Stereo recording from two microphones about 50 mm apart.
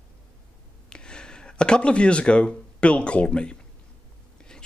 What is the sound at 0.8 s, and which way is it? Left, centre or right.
Speech, centre.